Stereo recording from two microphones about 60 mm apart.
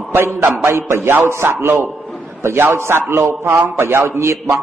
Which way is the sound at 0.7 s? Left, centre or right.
Right.